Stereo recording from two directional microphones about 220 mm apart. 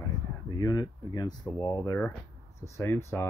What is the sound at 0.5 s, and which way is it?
Speech, 15° left (ahead or behind).